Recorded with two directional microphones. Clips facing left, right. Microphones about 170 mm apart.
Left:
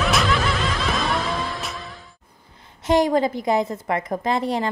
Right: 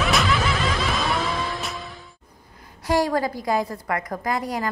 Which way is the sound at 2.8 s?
20° left (ahead or behind).